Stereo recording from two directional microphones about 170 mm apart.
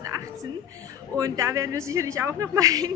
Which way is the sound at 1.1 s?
20° right (ahead or behind).